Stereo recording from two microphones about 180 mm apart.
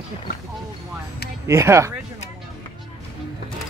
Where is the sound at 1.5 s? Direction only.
15° right (ahead or behind).